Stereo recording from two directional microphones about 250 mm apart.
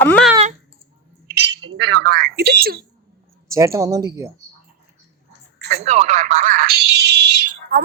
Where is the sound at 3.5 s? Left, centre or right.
Centre.